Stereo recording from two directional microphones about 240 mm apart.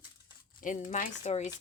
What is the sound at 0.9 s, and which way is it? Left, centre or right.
Speech, left.